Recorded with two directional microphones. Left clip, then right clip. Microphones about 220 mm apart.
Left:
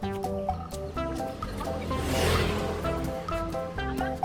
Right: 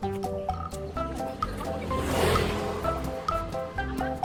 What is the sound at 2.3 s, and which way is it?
Music, 40° right (ahead or behind).